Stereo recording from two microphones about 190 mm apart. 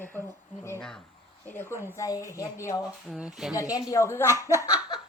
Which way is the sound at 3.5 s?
20° left (ahead or behind).